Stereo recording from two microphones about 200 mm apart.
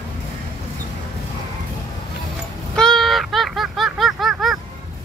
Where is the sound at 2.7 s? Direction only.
5° left (ahead or behind).